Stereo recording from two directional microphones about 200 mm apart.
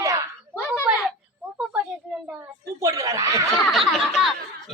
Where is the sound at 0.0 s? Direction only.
15° right (ahead or behind).